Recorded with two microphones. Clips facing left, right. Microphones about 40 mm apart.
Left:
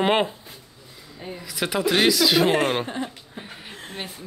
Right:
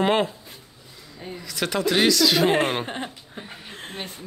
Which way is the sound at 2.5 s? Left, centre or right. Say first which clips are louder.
Even; centre.